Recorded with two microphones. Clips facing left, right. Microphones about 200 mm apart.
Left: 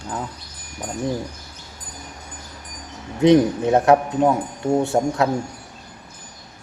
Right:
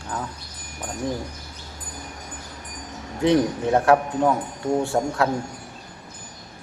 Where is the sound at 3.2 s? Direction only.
20° left (ahead or behind).